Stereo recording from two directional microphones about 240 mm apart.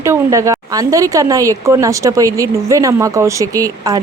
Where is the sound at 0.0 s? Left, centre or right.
Centre.